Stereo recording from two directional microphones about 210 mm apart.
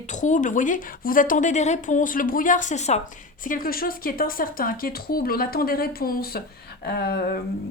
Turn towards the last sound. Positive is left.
turn(degrees=45)  # may be behind; listen again after turning